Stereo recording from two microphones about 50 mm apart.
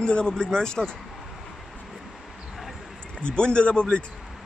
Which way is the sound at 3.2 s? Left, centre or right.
Centre.